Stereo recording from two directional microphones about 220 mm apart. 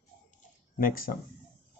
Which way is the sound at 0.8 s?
40° left (ahead or behind).